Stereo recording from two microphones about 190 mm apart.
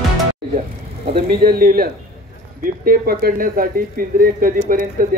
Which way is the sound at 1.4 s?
50° right (ahead or behind).